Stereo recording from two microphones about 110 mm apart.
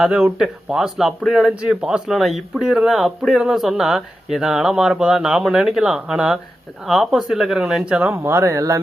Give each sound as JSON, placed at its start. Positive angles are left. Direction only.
{"t": 0.0, "sound": "speech", "side_deg": -5}
{"t": 8.1, "sound": "speech", "side_deg": -25}